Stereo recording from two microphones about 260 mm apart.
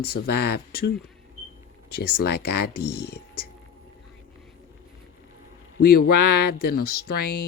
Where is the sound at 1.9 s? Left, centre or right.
Left.